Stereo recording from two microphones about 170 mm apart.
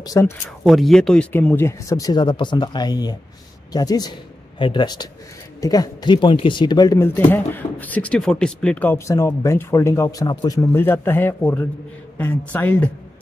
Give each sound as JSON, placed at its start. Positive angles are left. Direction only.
{"t": 0.0, "sound": "speech", "side_deg": 20}
{"t": 0.7, "sound": "speech", "side_deg": 0}
{"t": 7.2, "sound": "speech", "side_deg": 10}
{"t": 10.7, "sound": "speech", "side_deg": 15}